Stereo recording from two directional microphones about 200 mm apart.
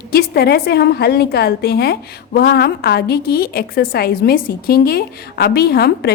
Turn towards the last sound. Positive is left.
turn(degrees=50)  # may be behind; listen again after turning